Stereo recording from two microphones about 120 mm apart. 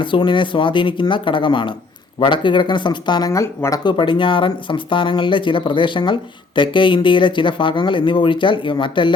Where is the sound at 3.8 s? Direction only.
40° left (ahead or behind).